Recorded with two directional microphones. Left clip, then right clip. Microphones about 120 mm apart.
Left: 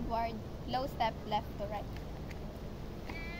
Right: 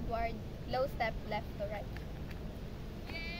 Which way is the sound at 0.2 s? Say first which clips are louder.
Left 1 dB; 15° right (ahead or behind).